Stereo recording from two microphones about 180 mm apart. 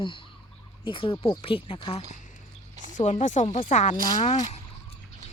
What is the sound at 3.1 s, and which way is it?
Speech, 40° left (ahead or behind).